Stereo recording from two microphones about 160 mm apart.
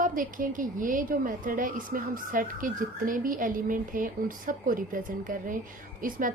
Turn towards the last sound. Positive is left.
turn(degrees=-60)  # may be behind; listen again after turning